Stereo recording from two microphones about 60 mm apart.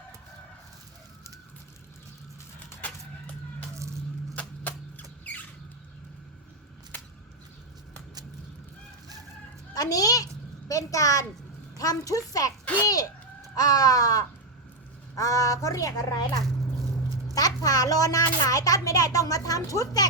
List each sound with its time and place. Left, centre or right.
4.4 s music: left
9.7 s a child's voice: left
10.7 s a child's voice: left
15.1 s a woman's voice: left
17.3 s a child's voice: left